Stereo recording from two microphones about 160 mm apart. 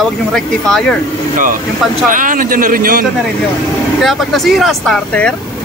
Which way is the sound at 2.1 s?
60° right (ahead or behind).